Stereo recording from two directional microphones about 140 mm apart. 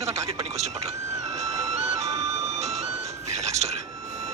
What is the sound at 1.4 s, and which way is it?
Music, 50° right (ahead or behind).